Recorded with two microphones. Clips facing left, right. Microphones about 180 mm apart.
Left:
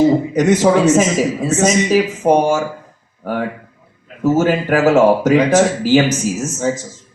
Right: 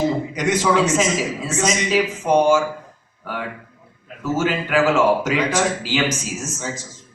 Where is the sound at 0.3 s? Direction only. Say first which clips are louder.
Left 4 dB; 45° left (ahead or behind).